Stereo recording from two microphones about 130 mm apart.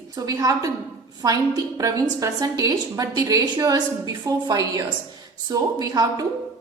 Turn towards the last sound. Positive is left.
turn(degrees=-30)  # may be behind; listen again after turning